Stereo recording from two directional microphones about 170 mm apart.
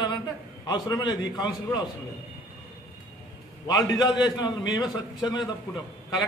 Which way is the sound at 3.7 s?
25° left (ahead or behind).